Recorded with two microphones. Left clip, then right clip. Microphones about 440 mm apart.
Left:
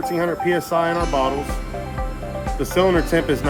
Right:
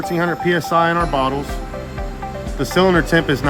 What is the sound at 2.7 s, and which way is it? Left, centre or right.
Speech, centre.